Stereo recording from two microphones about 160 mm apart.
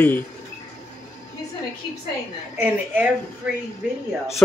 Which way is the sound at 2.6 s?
10° right (ahead or behind).